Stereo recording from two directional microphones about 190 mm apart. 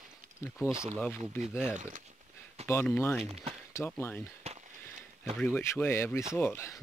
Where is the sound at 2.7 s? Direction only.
10° left (ahead or behind).